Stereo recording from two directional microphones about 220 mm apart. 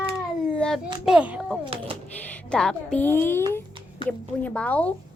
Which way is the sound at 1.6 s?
25° right (ahead or behind).